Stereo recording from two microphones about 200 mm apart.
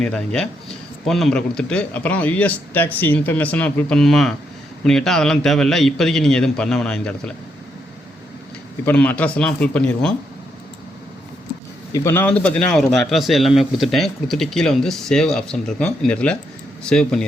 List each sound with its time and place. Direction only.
0.0 s a man's voice: 5° left (ahead or behind)
8.8 s a man's voice: 10° left (ahead or behind)
11.9 s a man's voice: 15° left (ahead or behind)